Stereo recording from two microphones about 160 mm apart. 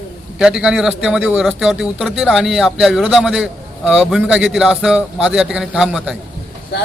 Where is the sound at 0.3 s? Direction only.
5° right (ahead or behind).